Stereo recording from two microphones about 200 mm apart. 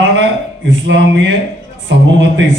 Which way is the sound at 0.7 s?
65° right (ahead or behind).